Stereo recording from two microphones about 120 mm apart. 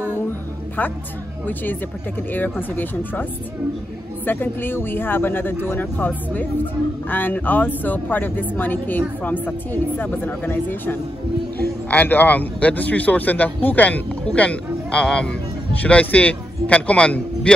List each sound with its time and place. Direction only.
2.7 s speech: 15° left (ahead or behind)
4.3 s speech: 15° left (ahead or behind)